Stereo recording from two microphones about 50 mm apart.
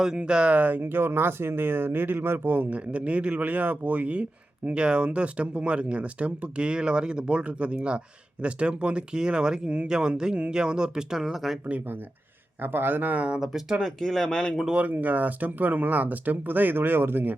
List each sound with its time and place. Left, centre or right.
0.0 s speech: centre
0.8 s speech: right; by 11.5 s centre
12.6 s speech: right
13.4 s speech: centre
13.8 s speech: centre
14.7 s speech: right